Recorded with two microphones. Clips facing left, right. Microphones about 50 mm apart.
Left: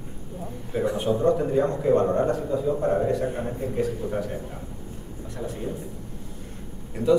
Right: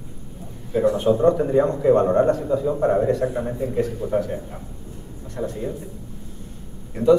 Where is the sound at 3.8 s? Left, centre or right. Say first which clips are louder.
Right 4 dB; centre.